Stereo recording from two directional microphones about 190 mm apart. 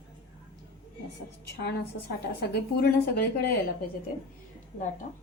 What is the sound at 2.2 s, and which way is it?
A woman's voice, 60° left (ahead or behind).